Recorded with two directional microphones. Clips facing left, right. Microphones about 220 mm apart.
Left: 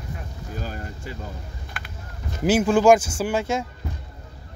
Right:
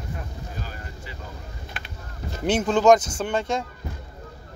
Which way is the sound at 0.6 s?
45° left (ahead or behind).